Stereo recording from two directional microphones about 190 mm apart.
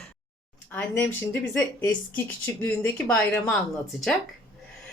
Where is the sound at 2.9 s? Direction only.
5° left (ahead or behind).